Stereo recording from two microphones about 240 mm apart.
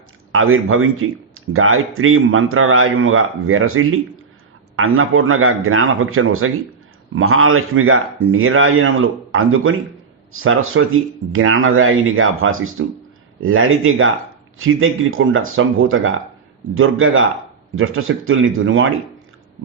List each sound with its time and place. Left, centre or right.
0.3 s speech: right